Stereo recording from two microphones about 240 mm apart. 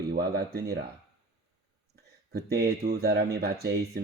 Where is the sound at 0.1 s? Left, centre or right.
Right.